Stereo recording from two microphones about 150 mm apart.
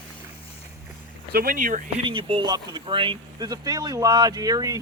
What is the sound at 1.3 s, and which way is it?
Speech, 80° right.